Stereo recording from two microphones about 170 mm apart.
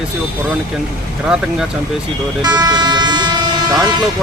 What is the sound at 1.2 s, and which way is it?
Speech, 5° right (ahead or behind).